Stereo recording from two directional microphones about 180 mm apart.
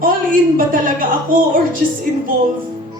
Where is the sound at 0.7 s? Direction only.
50° right (ahead or behind).